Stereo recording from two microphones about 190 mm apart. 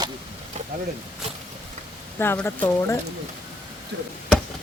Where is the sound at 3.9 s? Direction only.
60° right (ahead or behind).